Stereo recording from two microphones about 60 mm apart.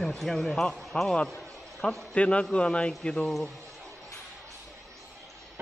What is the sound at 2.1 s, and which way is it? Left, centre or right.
A man's voice, left.